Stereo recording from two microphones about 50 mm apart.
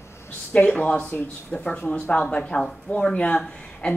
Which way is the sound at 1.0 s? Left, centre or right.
Left.